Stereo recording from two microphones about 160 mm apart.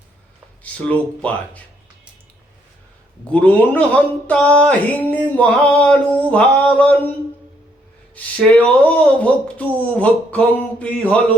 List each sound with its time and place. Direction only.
0.6 s speech: 10° left (ahead or behind)
3.2 s speech: 10° left (ahead or behind)
8.1 s speech: 5° left (ahead or behind)